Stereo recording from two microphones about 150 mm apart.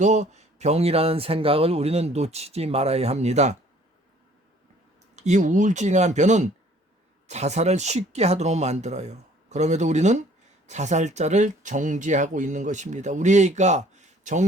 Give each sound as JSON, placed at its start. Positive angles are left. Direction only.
{"t": 0.0, "sound": "speech", "side_deg": -50}
{"t": 5.1, "sound": "speech", "side_deg": -50}